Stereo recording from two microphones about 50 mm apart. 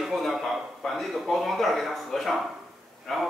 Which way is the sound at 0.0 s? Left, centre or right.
Centre.